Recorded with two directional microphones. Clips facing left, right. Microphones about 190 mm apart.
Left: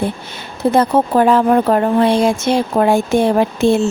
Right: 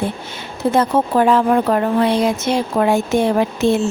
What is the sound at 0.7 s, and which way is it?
Speech, 35° left (ahead or behind).